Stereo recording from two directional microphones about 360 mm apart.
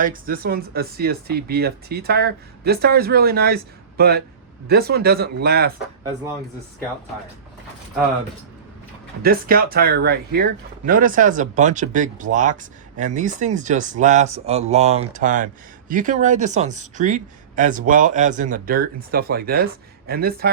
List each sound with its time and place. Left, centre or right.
0.0 s speech: right
9.2 s speech: right